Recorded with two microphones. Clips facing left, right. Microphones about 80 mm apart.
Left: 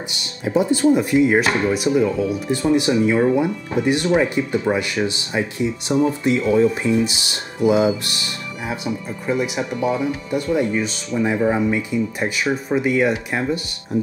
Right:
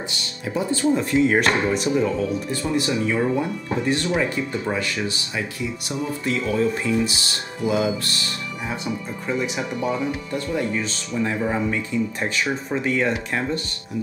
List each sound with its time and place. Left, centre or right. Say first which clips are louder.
0.5 s speech: left 5 dB; centre
8.6 s speech: left 3 dB; centre